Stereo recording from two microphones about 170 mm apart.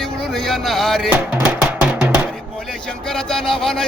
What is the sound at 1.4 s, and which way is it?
Music, 5° right (ahead or behind).